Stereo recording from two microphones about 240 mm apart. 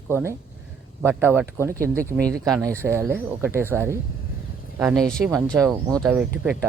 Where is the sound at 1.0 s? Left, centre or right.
Centre.